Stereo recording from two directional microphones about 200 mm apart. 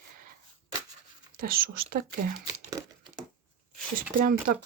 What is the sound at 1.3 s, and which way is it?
Speech, 45° right (ahead or behind).